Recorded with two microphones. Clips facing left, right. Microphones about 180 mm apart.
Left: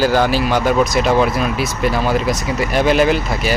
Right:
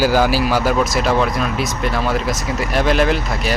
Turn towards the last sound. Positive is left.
turn(degrees=0)  # may be behind; listen again after turning